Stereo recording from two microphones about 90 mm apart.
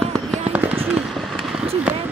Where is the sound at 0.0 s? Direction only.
5° left (ahead or behind).